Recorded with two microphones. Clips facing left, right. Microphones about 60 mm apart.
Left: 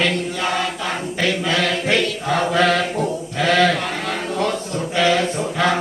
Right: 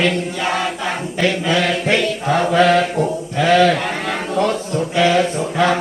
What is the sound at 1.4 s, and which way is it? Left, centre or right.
Chant, centre.